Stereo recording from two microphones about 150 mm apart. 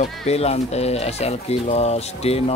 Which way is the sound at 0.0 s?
45° left (ahead or behind).